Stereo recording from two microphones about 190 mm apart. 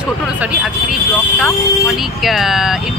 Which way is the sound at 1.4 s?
Centre (ahead or behind).